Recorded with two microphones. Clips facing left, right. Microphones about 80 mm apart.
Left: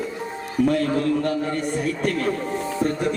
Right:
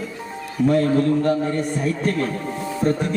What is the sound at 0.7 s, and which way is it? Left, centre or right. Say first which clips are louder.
Speech: right 7 dB; right.